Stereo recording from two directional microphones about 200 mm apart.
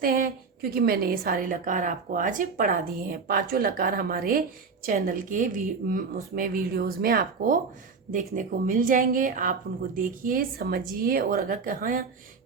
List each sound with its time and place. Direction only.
0.0 s a woman's voice: 45° right (ahead or behind)